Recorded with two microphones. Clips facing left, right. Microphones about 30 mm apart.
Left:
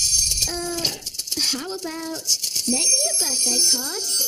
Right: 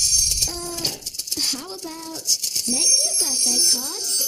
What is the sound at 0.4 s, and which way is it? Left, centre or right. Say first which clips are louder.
Bird: left 2 dB; left.